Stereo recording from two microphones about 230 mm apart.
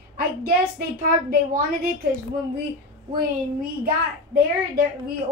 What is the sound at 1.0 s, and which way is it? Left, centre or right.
Speech, right.